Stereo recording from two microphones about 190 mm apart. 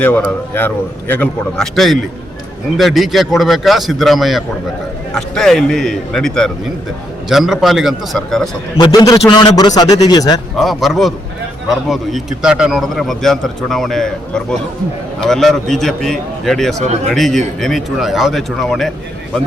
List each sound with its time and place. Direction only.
0.0 s a man's voice: 10° left (ahead or behind)
8.8 s a man's voice: 20° left (ahead or behind)
10.6 s a man's voice: centre (ahead or behind)